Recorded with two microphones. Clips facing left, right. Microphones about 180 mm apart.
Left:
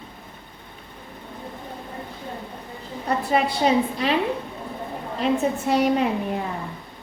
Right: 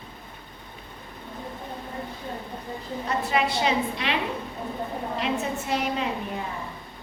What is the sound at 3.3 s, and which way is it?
Speech, 40° left (ahead or behind).